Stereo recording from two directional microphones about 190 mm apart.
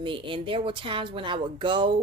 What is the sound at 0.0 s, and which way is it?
A woman's voice, 25° right (ahead or behind).